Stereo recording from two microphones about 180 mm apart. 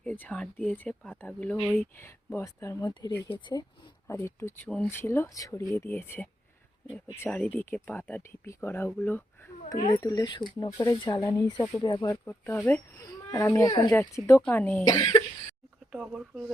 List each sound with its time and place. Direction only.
0.0 s speech: 10° left (ahead or behind)
2.0 s speech: 15° left (ahead or behind)
4.0 s speech: 15° left (ahead or behind)
9.7 s speech: 35° left (ahead or behind)
10.0 s speech: 20° left (ahead or behind)
15.9 s speech: 5° right (ahead or behind)